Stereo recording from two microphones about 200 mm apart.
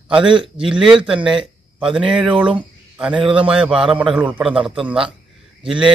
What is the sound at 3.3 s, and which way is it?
Speech, 5° right (ahead or behind).